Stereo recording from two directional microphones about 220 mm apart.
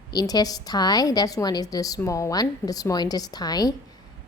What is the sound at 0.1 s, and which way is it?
A woman's voice, 15° left (ahead or behind).